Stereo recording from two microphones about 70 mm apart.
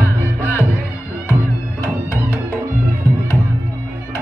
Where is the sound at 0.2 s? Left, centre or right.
Left.